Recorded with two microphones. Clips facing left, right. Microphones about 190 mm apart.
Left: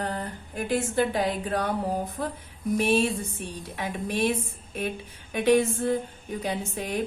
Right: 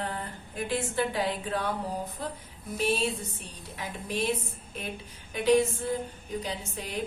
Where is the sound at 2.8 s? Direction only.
55° left (ahead or behind).